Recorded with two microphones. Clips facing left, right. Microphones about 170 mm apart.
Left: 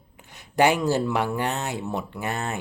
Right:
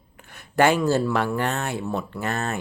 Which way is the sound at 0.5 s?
15° left (ahead or behind).